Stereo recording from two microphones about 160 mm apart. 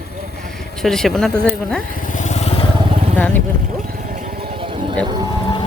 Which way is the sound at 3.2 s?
10° left (ahead or behind).